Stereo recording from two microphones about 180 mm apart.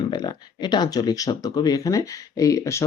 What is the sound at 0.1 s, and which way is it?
Speech, 25° left (ahead or behind).